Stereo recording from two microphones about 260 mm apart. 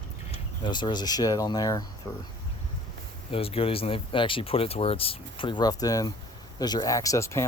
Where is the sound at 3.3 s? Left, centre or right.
Left.